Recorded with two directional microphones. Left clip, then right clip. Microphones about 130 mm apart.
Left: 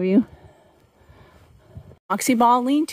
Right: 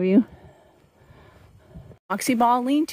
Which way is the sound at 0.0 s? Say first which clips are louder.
Even; 5° left (ahead or behind).